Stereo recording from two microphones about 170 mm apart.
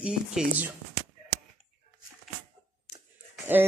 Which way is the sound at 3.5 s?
10° right (ahead or behind).